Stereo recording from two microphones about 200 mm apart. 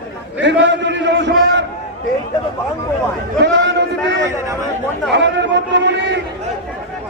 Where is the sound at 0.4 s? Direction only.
65° right (ahead or behind).